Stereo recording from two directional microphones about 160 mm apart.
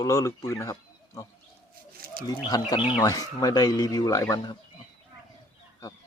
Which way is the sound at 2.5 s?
25° left (ahead or behind).